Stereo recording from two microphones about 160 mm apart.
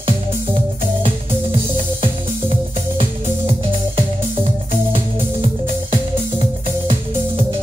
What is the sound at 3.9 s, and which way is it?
Music, 35° right (ahead or behind).